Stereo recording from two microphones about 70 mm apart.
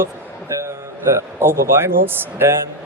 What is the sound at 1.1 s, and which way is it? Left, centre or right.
Speech, right.